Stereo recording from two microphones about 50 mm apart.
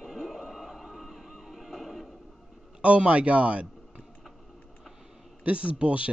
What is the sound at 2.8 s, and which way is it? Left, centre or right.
Speech, right.